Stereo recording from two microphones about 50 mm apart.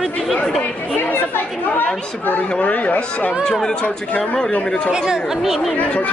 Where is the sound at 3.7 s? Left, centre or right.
Centre.